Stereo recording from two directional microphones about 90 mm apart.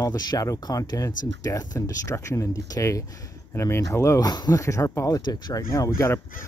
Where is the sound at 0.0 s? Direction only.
45° left (ahead or behind).